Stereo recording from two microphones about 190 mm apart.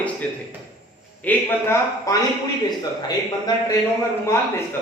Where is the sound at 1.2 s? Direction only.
10° left (ahead or behind).